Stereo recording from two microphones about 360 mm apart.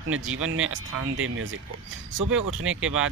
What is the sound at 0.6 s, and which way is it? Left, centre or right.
Speech, right.